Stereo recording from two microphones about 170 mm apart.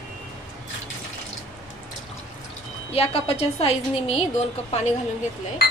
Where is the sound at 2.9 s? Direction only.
35° left (ahead or behind).